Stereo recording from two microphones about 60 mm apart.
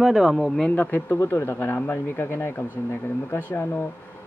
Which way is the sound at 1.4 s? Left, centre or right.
Left.